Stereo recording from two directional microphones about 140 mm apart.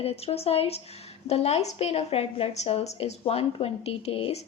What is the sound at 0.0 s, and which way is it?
A woman's voice, 45° left (ahead or behind).